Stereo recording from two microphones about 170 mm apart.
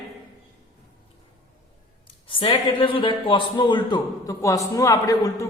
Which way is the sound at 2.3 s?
30° left (ahead or behind).